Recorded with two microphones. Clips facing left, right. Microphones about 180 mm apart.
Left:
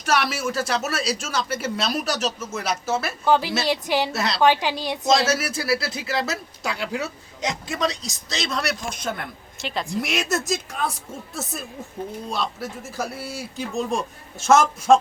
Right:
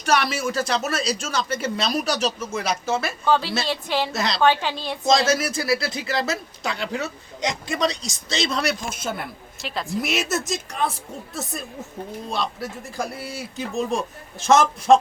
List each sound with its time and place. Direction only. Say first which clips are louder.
0.0 s speech: right 1 dB; 5° left (ahead or behind)